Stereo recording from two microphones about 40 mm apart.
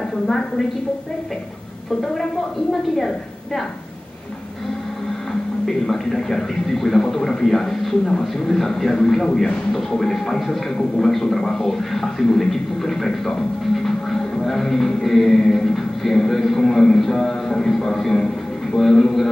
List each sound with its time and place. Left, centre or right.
2.7 s a man's voice: centre
5.7 s a man's voice: centre